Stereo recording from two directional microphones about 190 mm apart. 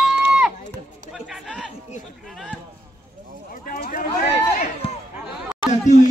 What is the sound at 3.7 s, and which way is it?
Run, 45° left (ahead or behind).